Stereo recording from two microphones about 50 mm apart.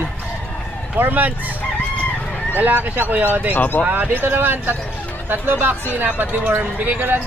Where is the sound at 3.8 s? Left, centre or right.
Right.